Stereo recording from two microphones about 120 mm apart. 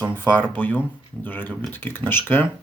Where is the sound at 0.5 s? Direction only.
15° left (ahead or behind).